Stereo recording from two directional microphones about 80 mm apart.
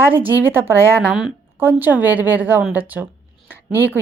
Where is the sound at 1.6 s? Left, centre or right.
Right.